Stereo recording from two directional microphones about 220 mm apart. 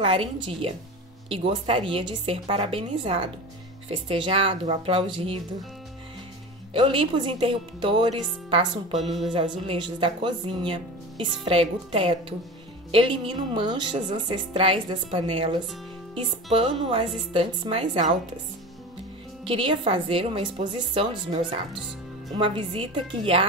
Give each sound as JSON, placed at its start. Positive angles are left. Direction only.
{"t": 0.0, "sound": "speech", "side_deg": -25}
{"t": 6.7, "sound": "speech", "side_deg": -25}
{"t": 9.3, "sound": "speech", "side_deg": -25}
{"t": 19.4, "sound": "speech", "side_deg": -25}